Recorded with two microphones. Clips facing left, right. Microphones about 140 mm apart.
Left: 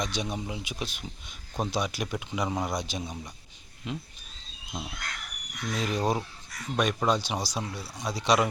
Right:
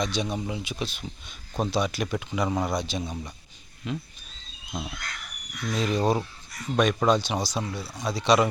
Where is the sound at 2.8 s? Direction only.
15° left (ahead or behind).